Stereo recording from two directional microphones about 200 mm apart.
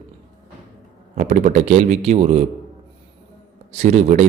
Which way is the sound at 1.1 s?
40° right (ahead or behind).